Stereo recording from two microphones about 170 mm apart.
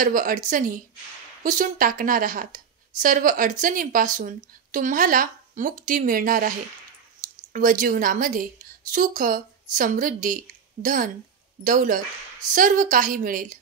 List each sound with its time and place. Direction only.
0.0 s a woman's voice: 50° right (ahead or behind)
7.5 s a woman's voice: 50° right (ahead or behind)